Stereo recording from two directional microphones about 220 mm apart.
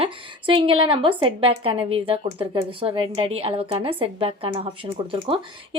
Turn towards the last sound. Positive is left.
turn(degrees=-25)  # may be behind; listen again after turning